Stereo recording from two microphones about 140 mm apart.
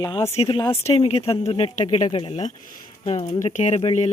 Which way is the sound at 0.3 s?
35° left (ahead or behind).